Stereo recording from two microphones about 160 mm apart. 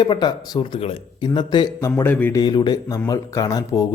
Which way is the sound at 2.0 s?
10° left (ahead or behind).